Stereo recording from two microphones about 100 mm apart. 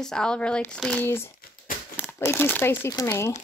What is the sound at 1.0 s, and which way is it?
Speech, 25° left (ahead or behind).